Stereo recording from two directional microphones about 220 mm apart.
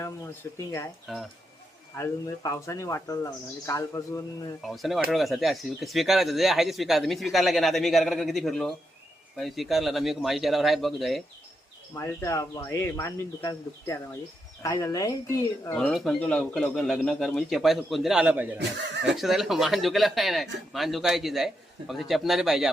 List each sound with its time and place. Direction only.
1.1 s speech: centre (ahead or behind)
2.0 s speech: 15° left (ahead or behind)
4.6 s speech: centre (ahead or behind)
11.9 s speech: 15° left (ahead or behind)
15.8 s speech: centre (ahead or behind)